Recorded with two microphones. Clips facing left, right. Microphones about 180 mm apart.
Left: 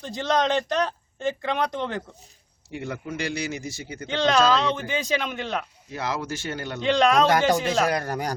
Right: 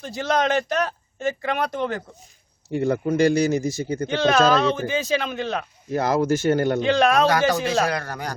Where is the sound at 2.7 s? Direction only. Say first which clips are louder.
Right 11 dB; 45° right (ahead or behind).